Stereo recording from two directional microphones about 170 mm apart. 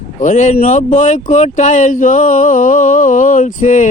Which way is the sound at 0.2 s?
45° left (ahead or behind).